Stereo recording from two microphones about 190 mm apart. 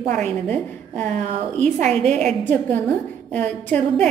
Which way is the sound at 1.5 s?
40° right (ahead or behind).